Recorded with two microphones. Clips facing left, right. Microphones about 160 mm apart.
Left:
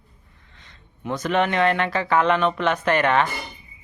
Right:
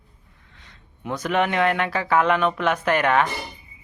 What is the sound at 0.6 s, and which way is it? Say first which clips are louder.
Speech: left 2 dB; 10° right (ahead or behind).